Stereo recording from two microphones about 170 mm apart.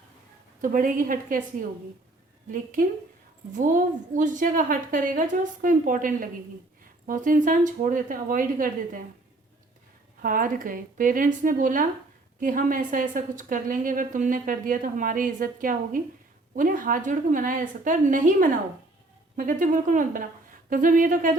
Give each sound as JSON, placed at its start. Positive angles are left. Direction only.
{"t": 0.6, "sound": "a woman's voice", "side_deg": -50}
{"t": 3.5, "sound": "a woman's voice", "side_deg": -50}
{"t": 10.2, "sound": "a woman's voice", "side_deg": -55}